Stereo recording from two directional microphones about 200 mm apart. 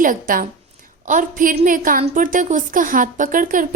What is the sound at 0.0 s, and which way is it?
A woman's voice, 45° right (ahead or behind).